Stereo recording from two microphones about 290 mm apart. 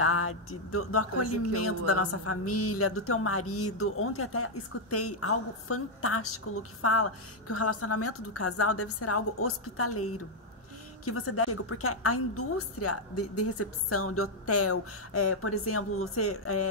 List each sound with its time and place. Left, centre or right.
0.0 s speech: left
11.1 s speech: left